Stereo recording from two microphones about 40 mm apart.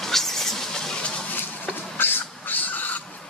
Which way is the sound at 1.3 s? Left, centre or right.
Left.